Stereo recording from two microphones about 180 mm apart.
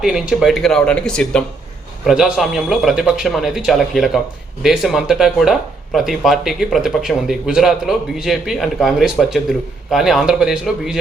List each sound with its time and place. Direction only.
0.0 s speech: 5° right (ahead or behind)